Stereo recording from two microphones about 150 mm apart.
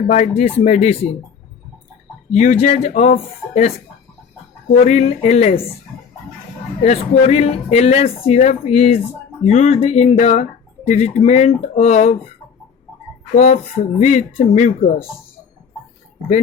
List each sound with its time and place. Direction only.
0.1 s speech: 55° left (ahead or behind)
2.3 s speech: 50° left (ahead or behind)
4.7 s speech: 50° left (ahead or behind)
6.8 s speech: 50° left (ahead or behind)
13.3 s speech: 45° left (ahead or behind)